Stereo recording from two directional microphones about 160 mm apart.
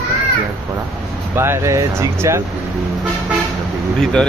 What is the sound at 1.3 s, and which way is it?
Speech, 15° right (ahead or behind).